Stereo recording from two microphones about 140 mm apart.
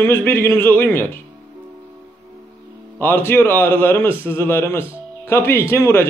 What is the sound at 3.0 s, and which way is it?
A man's voice, 15° left (ahead or behind).